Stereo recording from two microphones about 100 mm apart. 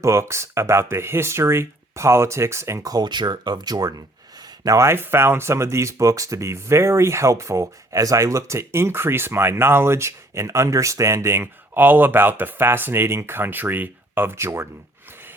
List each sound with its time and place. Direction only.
0.0 s speech: 30° right (ahead or behind)